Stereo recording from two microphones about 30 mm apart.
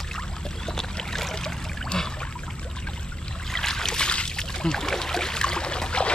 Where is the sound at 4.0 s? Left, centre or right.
Left.